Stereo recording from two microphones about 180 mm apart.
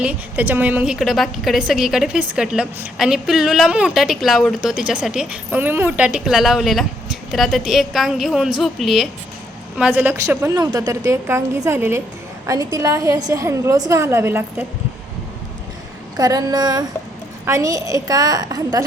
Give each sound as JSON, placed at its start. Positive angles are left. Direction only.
{"t": 0.0, "sound": "a woman's voice", "side_deg": -10}
{"t": 16.1, "sound": "a woman's voice", "side_deg": -20}